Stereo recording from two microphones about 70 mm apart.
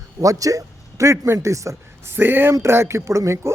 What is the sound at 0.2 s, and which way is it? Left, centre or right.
A man's voice, right.